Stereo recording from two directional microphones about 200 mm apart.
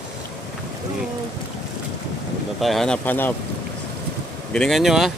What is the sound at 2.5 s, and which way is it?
Speech, centre (ahead or behind).